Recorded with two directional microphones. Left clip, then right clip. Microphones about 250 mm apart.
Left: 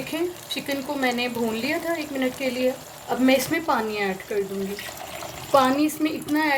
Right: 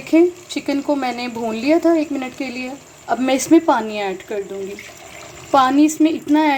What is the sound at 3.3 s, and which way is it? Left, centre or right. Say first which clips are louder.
Speech: right 7 dB; centre.